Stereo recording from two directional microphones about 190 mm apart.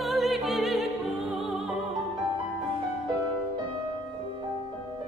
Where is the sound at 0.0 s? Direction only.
Centre (ahead or behind).